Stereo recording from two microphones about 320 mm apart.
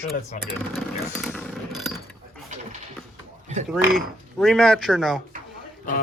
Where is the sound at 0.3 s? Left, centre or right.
Left.